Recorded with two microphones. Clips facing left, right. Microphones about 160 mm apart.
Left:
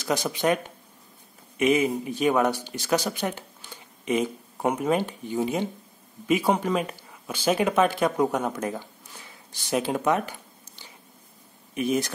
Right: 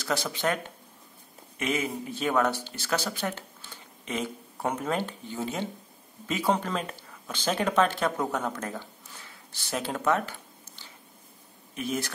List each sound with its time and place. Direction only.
0.0 s speech: 15° left (ahead or behind)